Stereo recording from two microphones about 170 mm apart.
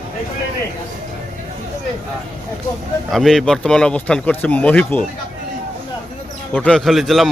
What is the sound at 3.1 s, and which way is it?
Speech, centre (ahead or behind).